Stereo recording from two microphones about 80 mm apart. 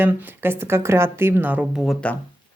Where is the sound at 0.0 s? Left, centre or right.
Right.